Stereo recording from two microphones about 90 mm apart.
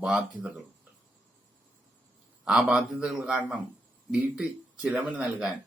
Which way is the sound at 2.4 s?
10° right (ahead or behind).